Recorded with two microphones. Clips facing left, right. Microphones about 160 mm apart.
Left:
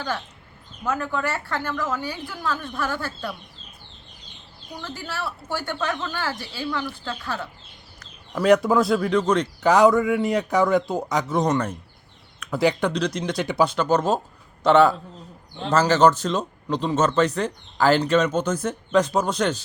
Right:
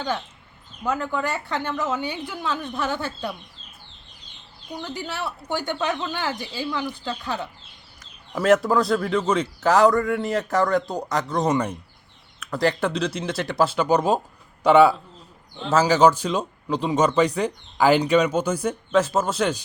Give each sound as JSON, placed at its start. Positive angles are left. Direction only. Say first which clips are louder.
{"t": 0.9, "sound": "a woman's voice", "louder": "right 1 dB", "side_deg": -15}
{"t": 4.8, "sound": "speech", "louder": "right 1 dB", "side_deg": -15}
{"t": 8.4, "sound": "a man's voice", "louder": "left 1 dB", "side_deg": 0}
{"t": 11.5, "sound": "speech", "louder": "right 1 dB", "side_deg": -10}
{"t": 12.4, "sound": "a man's voice", "louder": "left 1 dB", "side_deg": 0}